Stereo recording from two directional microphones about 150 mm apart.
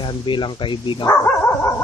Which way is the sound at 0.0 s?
35° left (ahead or behind).